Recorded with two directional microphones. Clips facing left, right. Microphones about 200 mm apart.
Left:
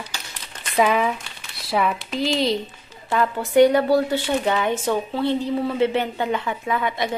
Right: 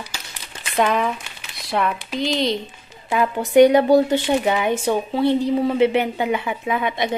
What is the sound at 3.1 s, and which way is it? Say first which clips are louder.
Speech: right 2 dB; 15° right (ahead or behind).